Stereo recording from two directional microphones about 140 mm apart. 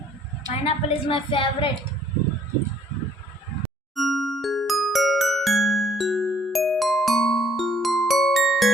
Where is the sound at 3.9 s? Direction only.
Centre (ahead or behind).